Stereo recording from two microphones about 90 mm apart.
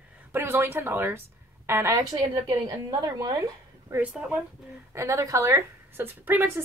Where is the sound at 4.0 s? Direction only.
10° right (ahead or behind).